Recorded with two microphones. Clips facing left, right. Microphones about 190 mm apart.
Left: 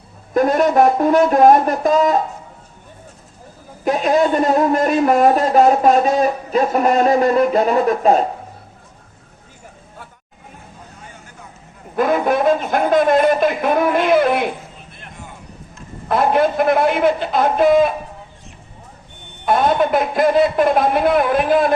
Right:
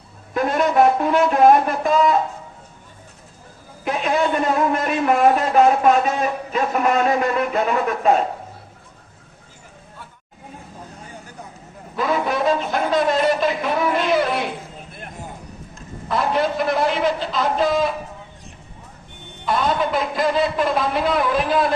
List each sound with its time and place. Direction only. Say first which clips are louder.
0.3 s speech: left 4 dB; 40° left (ahead or behind)
3.8 s speech: left 5 dB; 40° left (ahead or behind)
11.9 s speech: left 5 dB; 50° left (ahead or behind)
16.0 s a man's voice: left 5 dB; 55° left (ahead or behind)
19.5 s a man's voice: left 5 dB; 55° left (ahead or behind)